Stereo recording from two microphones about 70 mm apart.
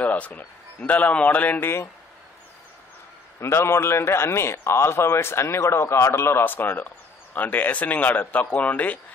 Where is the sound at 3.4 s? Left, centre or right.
Left.